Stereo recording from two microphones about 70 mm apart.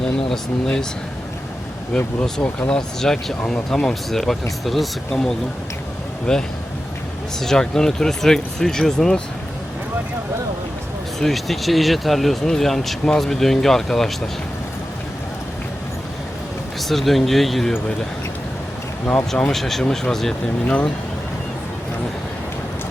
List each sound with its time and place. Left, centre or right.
0.0 s speech: centre
2.4 s speech: left
2.7 s speech: centre
11.2 s speech: centre
16.9 s speech: centre
19.3 s speech: centre